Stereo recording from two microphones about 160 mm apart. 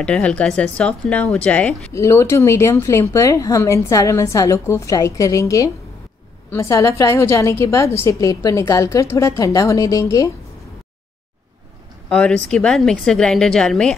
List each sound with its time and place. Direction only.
0.0 s speech: 5° left (ahead or behind)
2.0 s a woman's voice: 20° left (ahead or behind)
12.1 s a woman's voice: 5° left (ahead or behind)